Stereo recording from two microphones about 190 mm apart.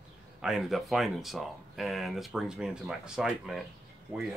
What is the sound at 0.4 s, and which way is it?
Speech, centre (ahead or behind).